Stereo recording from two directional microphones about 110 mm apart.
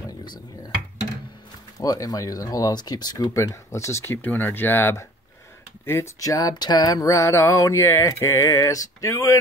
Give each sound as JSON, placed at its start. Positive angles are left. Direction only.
{"t": 0.0, "sound": "dishes", "side_deg": 40}
{"t": 1.8, "sound": "speech", "side_deg": 30}
{"t": 5.9, "sound": "a sound", "side_deg": 25}